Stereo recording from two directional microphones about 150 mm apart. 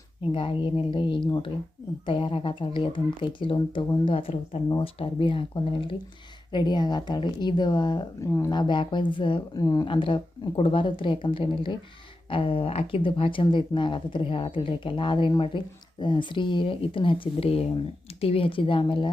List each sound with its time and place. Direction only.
0.3 s a woman's voice: 35° left (ahead or behind)